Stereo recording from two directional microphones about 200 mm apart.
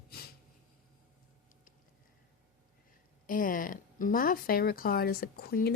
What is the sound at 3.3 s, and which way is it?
Speech, 45° left (ahead or behind).